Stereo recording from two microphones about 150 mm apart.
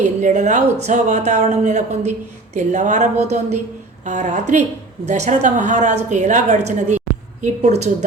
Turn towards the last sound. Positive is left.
turn(degrees=-50)  # may be behind; listen again after turning